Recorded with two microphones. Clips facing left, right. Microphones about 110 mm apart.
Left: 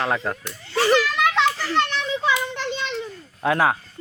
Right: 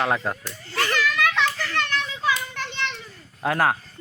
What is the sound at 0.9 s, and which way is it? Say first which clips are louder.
Children playing: left 4 dB; 20° left (ahead or behind).